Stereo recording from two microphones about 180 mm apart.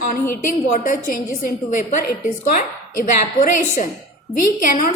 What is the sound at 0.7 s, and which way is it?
A woman's voice, 50° left (ahead or behind).